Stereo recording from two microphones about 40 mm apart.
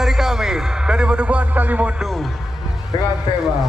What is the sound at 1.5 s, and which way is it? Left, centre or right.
Music, right.